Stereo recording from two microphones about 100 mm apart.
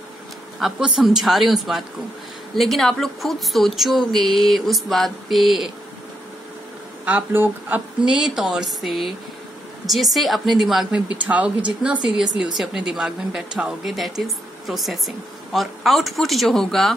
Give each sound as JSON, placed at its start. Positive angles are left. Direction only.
{"t": 0.6, "sound": "speech", "side_deg": -5}
{"t": 7.1, "sound": "speech", "side_deg": -20}
{"t": 8.0, "sound": "speech", "side_deg": -5}